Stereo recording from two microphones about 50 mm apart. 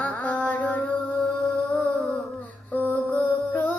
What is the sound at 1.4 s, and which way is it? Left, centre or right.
Music, centre.